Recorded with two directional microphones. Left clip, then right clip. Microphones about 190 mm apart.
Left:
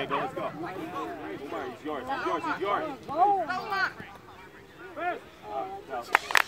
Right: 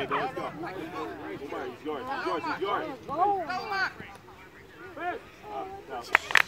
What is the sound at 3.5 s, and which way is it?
Speech, 40° right (ahead or behind).